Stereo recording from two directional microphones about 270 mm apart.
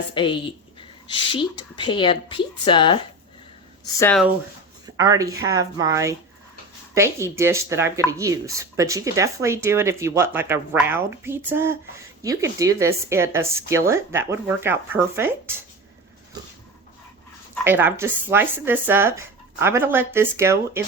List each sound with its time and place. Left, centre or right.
0.1 s a woman's voice: centre
3.9 s speech: centre
4.9 s speech: centre
17.6 s speech: centre